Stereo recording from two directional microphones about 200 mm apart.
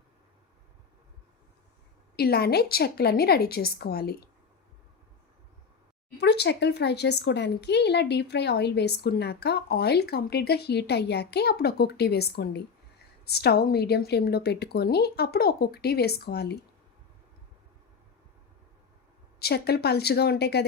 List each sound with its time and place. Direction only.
2.1 s a woman's voice: 50° left (ahead or behind)
6.1 s a woman's voice: 55° left (ahead or behind)
19.4 s a woman's voice: 55° left (ahead or behind)